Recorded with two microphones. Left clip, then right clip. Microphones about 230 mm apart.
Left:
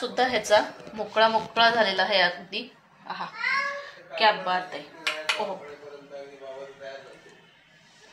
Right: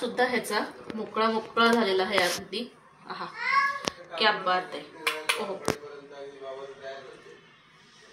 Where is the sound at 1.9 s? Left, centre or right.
Left.